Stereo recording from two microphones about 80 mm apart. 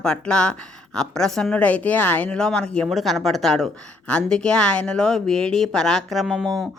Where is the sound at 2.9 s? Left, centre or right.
Centre.